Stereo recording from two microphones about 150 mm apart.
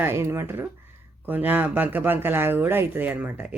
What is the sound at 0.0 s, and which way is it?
Speech, 15° right (ahead or behind).